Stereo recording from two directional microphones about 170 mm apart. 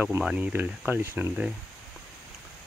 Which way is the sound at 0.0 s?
5° right (ahead or behind).